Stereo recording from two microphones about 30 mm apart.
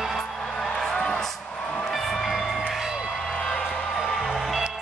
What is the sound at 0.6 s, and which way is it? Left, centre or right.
Music, centre.